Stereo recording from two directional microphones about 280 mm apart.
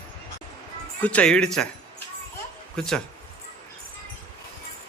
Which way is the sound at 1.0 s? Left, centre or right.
Centre.